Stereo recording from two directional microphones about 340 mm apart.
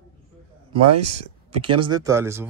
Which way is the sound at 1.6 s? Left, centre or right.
Centre.